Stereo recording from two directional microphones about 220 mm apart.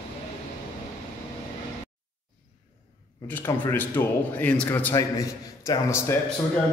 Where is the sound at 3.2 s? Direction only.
10° left (ahead or behind).